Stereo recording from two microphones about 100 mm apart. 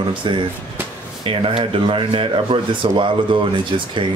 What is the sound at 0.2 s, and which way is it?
Speech, 55° right (ahead or behind).